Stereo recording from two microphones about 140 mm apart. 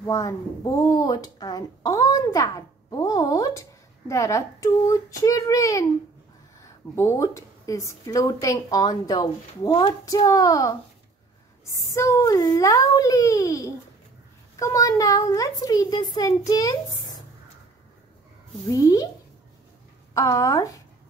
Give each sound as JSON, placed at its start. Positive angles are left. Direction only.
{"t": 0.0, "sound": "speech", "side_deg": 25}
{"t": 18.7, "sound": "speech", "side_deg": 25}
{"t": 20.2, "sound": "speech", "side_deg": 25}